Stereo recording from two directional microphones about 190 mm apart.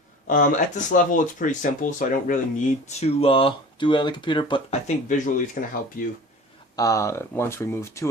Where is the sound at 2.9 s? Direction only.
35° left (ahead or behind).